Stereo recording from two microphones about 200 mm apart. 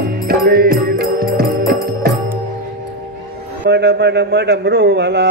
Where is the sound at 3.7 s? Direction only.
55° right (ahead or behind).